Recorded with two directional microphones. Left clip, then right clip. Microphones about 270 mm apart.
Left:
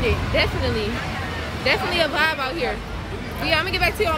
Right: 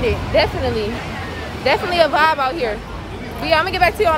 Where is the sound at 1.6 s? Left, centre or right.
Centre.